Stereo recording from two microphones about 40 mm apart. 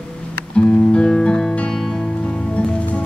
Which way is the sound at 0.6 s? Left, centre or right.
Left.